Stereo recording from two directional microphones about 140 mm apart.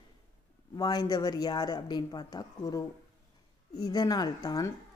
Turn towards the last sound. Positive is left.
turn(degrees=25)  # may be behind; listen again after turning